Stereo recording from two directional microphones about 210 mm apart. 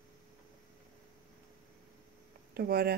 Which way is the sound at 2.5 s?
50° right (ahead or behind).